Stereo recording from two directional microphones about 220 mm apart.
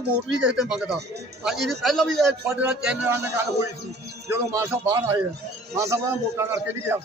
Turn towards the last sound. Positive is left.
turn(degrees=-10)  # may be behind; listen again after turning